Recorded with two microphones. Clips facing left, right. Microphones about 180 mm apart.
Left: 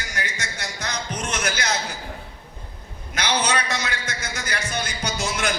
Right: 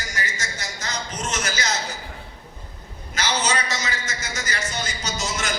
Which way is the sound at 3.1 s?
60° left (ahead or behind).